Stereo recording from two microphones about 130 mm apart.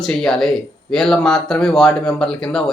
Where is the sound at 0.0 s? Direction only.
5° left (ahead or behind).